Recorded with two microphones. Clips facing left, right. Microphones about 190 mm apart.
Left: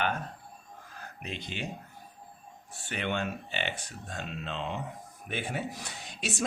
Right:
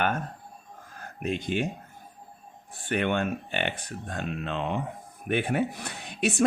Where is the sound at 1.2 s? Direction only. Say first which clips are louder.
Right 11 dB; 50° right (ahead or behind).